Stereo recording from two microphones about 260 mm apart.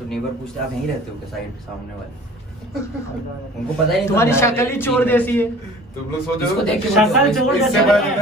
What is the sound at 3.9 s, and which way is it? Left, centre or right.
A man's voice, centre.